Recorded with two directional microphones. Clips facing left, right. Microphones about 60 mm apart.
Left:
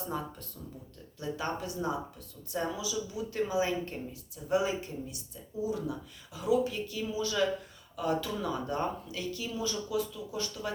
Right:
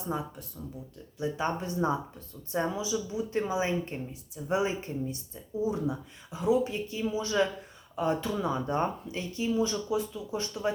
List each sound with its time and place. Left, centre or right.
0.6 s a woman's voice: right